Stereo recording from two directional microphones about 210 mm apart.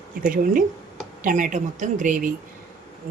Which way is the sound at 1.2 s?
40° right (ahead or behind).